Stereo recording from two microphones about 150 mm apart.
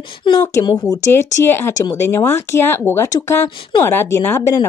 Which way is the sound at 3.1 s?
30° left (ahead or behind).